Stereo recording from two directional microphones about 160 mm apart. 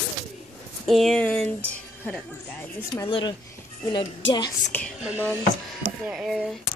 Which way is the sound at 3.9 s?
25° left (ahead or behind).